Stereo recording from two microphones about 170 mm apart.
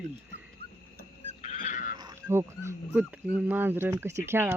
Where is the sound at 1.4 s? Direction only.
45° left (ahead or behind).